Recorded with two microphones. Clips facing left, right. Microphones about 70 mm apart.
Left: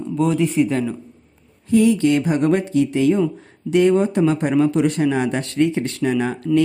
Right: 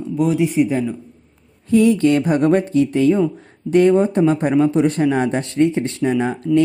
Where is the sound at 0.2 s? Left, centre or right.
Centre.